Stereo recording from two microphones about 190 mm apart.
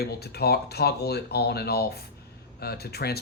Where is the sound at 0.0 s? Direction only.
55° left (ahead or behind).